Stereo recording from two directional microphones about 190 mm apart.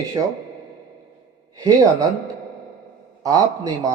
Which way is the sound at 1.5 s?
20° right (ahead or behind).